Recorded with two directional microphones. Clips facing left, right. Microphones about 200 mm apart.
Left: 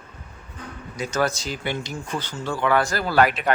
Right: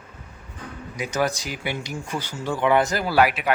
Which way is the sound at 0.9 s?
15° right (ahead or behind).